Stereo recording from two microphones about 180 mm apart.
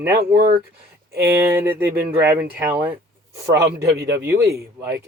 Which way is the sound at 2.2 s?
10° right (ahead or behind).